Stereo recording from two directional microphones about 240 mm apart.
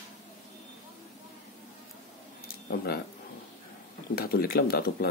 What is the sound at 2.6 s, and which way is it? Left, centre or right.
Speech, left.